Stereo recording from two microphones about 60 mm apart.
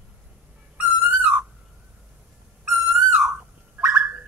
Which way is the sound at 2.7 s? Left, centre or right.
Centre.